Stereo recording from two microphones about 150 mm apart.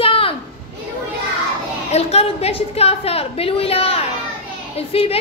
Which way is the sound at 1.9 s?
45° left (ahead or behind).